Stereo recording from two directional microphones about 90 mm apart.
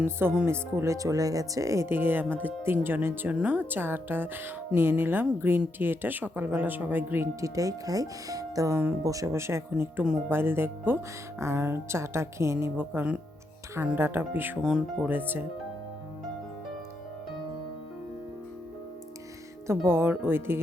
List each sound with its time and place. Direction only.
0.0 s speech: 25° right (ahead or behind)
7.4 s speech: 40° right (ahead or behind); by 14.6 s 25° right (ahead or behind)
14.6 s speech: 5° right (ahead or behind)
15.0 s speech: 20° right (ahead or behind)
19.6 s speech: 30° right (ahead or behind)